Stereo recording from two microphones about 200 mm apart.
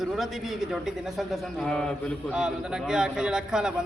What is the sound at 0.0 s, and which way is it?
A man's voice, centre (ahead or behind).